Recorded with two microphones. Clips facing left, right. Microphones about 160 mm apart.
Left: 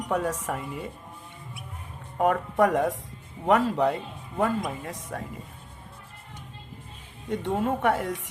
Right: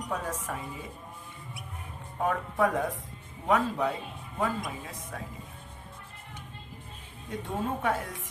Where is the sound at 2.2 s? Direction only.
65° left (ahead or behind).